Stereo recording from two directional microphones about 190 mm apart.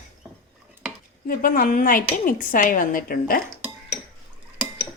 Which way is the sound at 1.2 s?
45° left (ahead or behind).